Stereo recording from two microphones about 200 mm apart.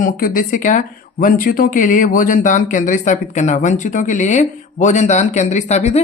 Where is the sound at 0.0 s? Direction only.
45° left (ahead or behind).